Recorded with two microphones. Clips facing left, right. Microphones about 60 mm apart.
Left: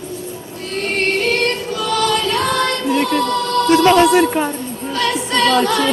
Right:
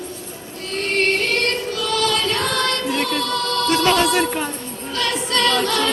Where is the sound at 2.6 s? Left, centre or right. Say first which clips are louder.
Left 4 dB; centre.